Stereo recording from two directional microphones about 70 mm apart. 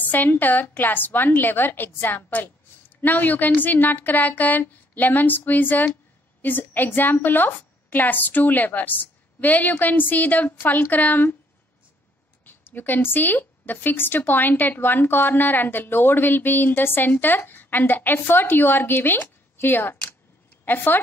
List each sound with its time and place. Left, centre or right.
0.1 s a woman's voice: left
12.4 s a woman's voice: left